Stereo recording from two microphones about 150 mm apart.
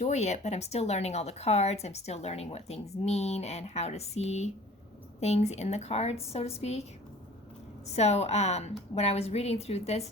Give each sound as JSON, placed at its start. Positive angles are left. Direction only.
{"t": 0.0, "sound": "a woman's voice", "side_deg": 50}
{"t": 7.9, "sound": "a woman's voice", "side_deg": 45}